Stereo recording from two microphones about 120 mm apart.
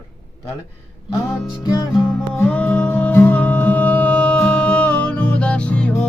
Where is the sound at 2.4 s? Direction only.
10° left (ahead or behind).